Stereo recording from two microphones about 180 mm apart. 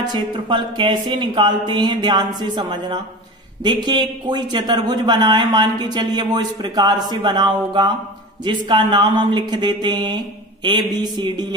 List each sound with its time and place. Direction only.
0.0 s speech: 25° right (ahead or behind)